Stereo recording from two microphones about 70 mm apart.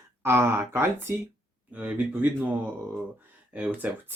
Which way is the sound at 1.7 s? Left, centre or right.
Right.